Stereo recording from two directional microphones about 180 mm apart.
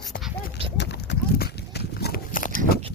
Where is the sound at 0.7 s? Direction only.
75° left (ahead or behind); by 2.8 s 50° left (ahead or behind).